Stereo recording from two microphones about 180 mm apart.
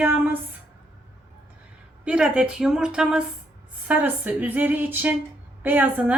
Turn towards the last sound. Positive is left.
turn(degrees=-10)  # may be behind; listen again after turning